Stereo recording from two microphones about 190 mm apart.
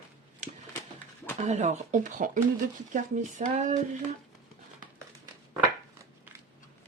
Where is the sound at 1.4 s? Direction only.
35° right (ahead or behind).